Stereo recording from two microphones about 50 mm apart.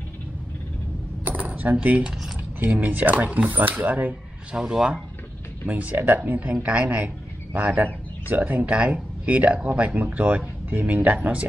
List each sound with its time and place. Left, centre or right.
1.2 s coin: right
2.7 s speech: right
4.5 s speech: centre
5.7 s a man's voice: right